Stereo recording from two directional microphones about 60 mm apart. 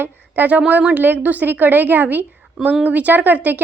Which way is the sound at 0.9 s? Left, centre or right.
Right.